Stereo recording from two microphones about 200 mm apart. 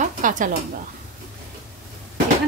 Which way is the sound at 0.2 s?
40° right (ahead or behind).